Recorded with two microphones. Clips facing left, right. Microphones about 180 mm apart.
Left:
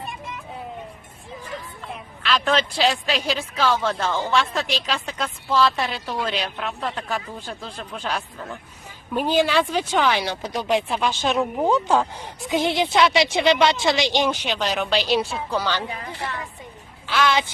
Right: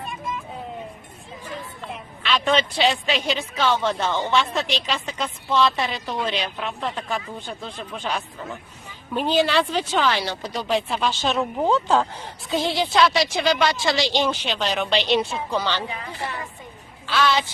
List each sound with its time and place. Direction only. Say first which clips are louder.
2.2 s a woman's voice: even; centre (ahead or behind)
9.1 s speech: even; 10° left (ahead or behind)
17.1 s speech: even; 15° left (ahead or behind)